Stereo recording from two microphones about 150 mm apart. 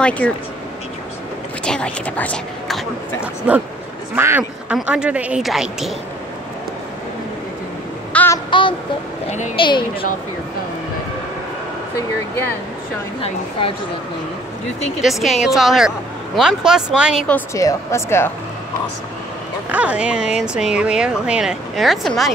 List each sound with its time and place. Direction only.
0.2 s speech: 10° left (ahead or behind)
1.6 s speech: 5° left (ahead or behind)
3.2 s speech: 10° right (ahead or behind)
8.1 s a sound: 10° left (ahead or behind)
8.5 s a sound: 35° left (ahead or behind)
9.6 s a woman's voice: 30° left (ahead or behind)
15.0 s speech: centre (ahead or behind)
17.6 s a woman's voice: 20° left (ahead or behind)
19.7 s speech: 10° right (ahead or behind)